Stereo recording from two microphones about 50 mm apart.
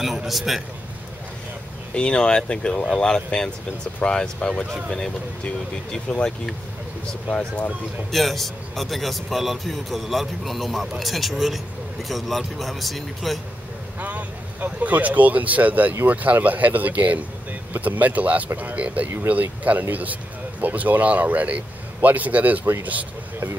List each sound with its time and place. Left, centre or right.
0.3 s a man's voice: centre
2.0 s speech: centre
8.1 s a man's voice: centre
13.9 s speech: right